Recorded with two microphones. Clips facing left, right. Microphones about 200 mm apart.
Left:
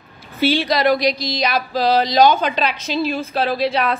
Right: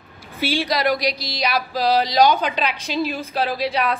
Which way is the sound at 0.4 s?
10° right (ahead or behind).